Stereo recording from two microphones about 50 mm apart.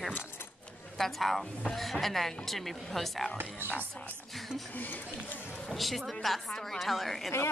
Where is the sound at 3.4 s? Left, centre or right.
Right.